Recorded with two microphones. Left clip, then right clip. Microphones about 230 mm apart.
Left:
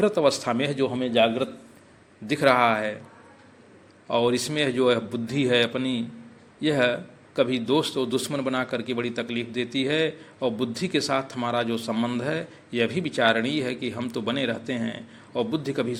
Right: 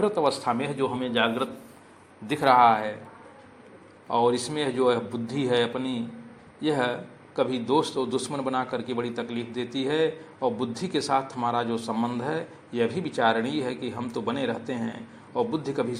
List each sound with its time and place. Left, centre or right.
0.0 s a man's voice: left
4.1 s a man's voice: left